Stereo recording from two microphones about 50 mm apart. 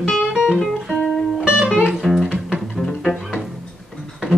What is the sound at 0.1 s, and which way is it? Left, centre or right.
Music, centre.